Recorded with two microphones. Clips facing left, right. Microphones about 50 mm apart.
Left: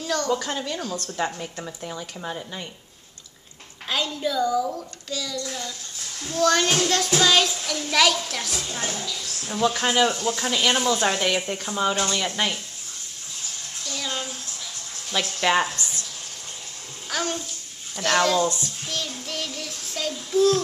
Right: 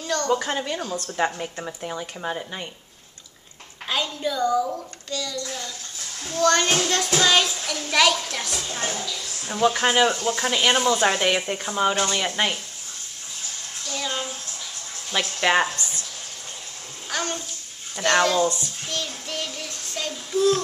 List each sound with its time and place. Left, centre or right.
0.0 s speech: centre
0.3 s speech: centre
3.8 s a child's voice: centre
8.6 s a woman's voice: centre
9.6 s child singing: centre
13.9 s a sound: centre
15.0 s speech: centre
17.1 s a child's voice: centre
17.9 s child singing: centre
19.7 s child singing: centre
20.1 s a child's voice: centre